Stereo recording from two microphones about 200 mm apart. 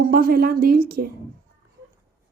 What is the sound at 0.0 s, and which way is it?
A woman's voice, 50° right (ahead or behind).